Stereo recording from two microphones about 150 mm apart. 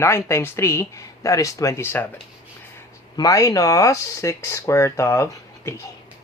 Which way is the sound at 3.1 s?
25° left (ahead or behind).